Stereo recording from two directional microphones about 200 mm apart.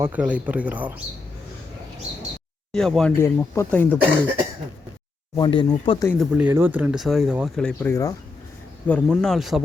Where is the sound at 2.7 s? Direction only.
Centre (ahead or behind).